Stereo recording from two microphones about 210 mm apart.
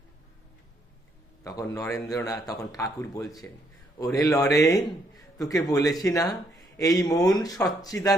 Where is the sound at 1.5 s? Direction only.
15° left (ahead or behind).